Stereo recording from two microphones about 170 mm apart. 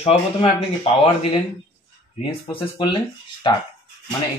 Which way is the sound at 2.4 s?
25° left (ahead or behind).